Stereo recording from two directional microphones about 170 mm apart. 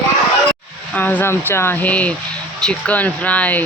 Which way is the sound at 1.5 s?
15° left (ahead or behind).